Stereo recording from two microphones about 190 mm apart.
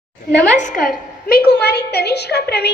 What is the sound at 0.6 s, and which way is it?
A woman's voice, 45° left (ahead or behind).